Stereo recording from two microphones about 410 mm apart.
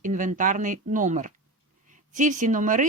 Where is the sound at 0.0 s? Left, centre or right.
Centre.